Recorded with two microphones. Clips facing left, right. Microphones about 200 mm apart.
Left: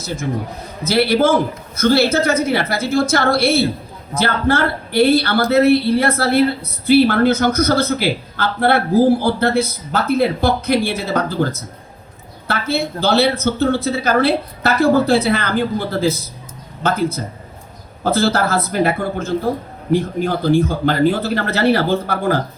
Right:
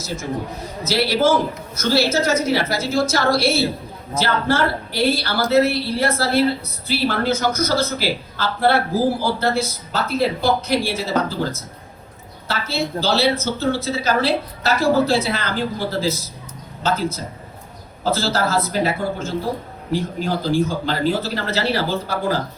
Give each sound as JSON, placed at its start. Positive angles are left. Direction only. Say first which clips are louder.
{"t": 0.9, "sound": "a woman's voice", "louder": "left 3 dB", "side_deg": 55}